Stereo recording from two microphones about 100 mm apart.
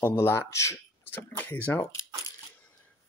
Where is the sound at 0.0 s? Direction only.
25° left (ahead or behind).